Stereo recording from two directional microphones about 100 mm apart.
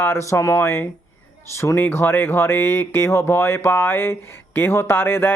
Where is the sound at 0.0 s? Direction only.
25° left (ahead or behind).